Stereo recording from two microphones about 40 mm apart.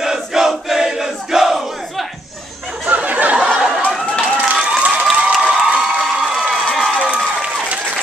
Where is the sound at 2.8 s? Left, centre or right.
Right.